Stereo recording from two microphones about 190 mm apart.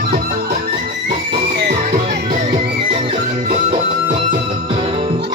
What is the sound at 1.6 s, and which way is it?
Music, 55° right (ahead or behind).